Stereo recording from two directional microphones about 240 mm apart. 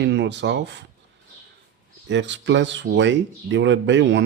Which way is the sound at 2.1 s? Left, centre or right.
Right.